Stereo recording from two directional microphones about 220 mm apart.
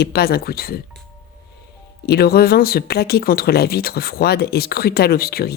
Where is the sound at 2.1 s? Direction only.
45° left (ahead or behind).